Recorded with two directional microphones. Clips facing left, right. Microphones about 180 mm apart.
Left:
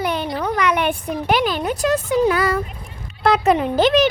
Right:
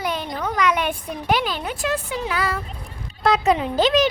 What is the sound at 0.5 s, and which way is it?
A woman's voice, 60° left (ahead or behind).